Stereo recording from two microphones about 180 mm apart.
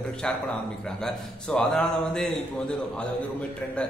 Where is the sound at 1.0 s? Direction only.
5° left (ahead or behind).